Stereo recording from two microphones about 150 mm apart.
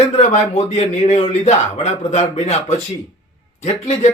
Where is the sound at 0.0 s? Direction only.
50° left (ahead or behind).